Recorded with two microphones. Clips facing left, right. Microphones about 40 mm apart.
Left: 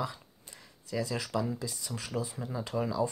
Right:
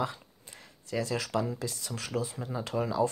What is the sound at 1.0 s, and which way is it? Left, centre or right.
Speech, right.